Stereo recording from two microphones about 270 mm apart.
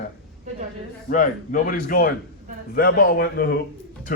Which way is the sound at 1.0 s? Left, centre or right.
Left.